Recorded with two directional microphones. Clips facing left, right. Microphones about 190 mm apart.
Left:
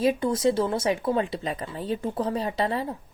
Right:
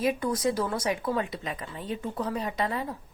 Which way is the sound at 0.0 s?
25° left (ahead or behind).